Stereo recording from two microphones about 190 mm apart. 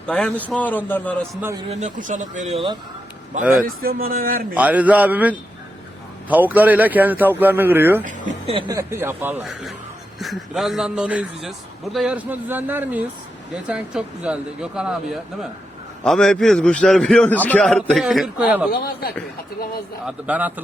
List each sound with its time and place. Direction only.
0.0 s speech: 5° left (ahead or behind)
1.7 s speech: 40° right (ahead or behind)
3.5 s speech: 50° right (ahead or behind)
4.5 s speech: 10° right (ahead or behind)
8.4 s a man's voice: 25° right (ahead or behind); by 18.7 s 5° right (ahead or behind)
18.7 s a man's voice: 55° left (ahead or behind)
20.1 s speech: 10° right (ahead or behind)